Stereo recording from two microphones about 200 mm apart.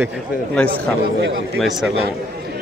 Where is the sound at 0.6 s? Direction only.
5° left (ahead or behind).